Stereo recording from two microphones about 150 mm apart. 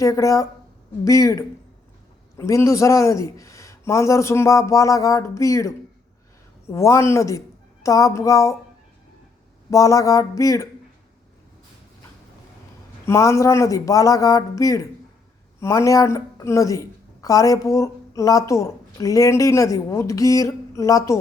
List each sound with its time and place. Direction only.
0.0 s a woman's voice: 20° left (ahead or behind)
9.6 s a woman's voice: 20° left (ahead or behind)
13.1 s a woman's voice: 20° left (ahead or behind)